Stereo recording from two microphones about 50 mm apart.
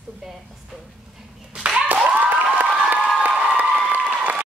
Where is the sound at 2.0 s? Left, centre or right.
Right.